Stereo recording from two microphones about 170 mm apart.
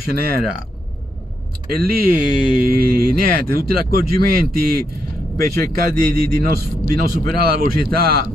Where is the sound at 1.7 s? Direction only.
65° right (ahead or behind).